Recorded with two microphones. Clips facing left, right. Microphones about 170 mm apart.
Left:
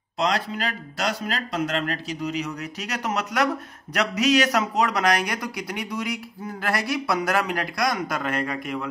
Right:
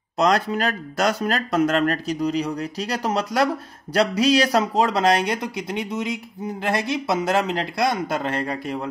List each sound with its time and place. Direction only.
0.2 s speech: 45° right (ahead or behind)